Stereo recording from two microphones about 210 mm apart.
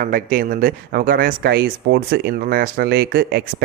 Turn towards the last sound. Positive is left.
turn(degrees=-50)  # may be behind; listen again after turning